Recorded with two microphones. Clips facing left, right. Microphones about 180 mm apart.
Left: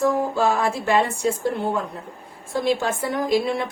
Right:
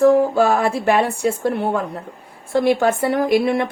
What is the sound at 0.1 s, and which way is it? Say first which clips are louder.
Speech: right 6 dB; 60° right (ahead or behind).